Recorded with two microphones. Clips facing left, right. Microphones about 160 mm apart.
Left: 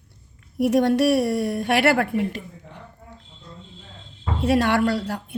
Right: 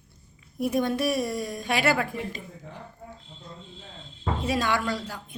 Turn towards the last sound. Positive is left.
turn(degrees=70)  # may be behind; listen again after turning